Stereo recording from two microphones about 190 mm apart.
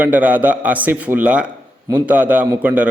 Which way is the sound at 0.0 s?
10° right (ahead or behind).